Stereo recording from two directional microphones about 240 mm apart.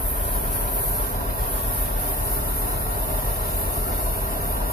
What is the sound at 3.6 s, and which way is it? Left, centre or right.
Vehicle, left.